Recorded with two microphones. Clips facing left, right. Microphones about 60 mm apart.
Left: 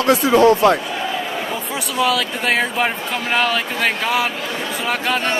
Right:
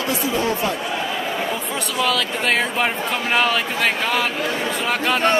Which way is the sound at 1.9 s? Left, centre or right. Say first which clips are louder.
Left 3 dB; centre.